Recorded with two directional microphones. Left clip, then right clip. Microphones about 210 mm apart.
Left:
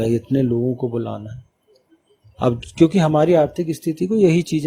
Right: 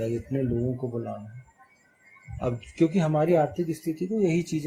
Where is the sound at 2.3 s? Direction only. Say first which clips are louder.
Left 10 dB; 50° left (ahead or behind).